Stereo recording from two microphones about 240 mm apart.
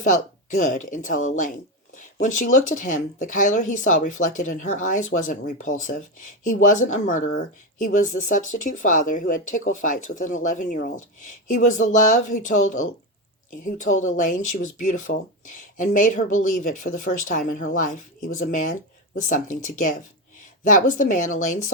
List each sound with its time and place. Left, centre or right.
0.0 s speech: left